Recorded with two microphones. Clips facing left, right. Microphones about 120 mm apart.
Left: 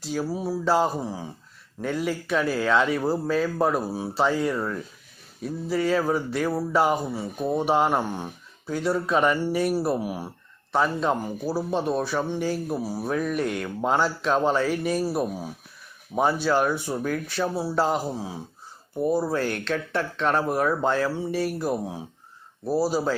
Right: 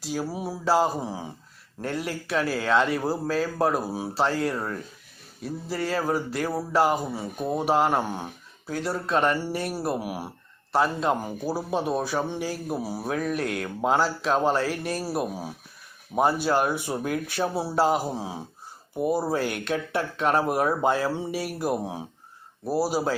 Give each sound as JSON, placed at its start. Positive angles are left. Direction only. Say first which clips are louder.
{"t": 0.0, "sound": "speech", "louder": "left 2 dB", "side_deg": -5}
{"t": 0.7, "sound": "speech", "louder": "right 1 dB", "side_deg": -5}
{"t": 1.0, "sound": "speech", "louder": "even", "side_deg": -15}
{"t": 1.8, "sound": "speech", "louder": "left 3 dB", "side_deg": 0}
{"t": 8.1, "sound": "a sound", "louder": "left 1 dB", "side_deg": -10}
{"t": 8.7, "sound": "speech", "louder": "left 2 dB", "side_deg": 0}